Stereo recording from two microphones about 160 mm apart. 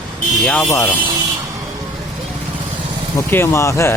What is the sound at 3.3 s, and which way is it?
Speech, 15° left (ahead or behind).